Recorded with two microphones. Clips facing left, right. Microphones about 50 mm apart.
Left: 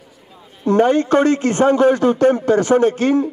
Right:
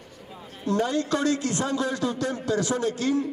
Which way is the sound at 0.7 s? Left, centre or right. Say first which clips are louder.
Left 11 dB; left.